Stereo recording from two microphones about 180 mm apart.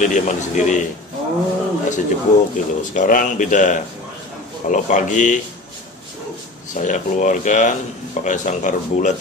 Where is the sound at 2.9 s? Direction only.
45° left (ahead or behind).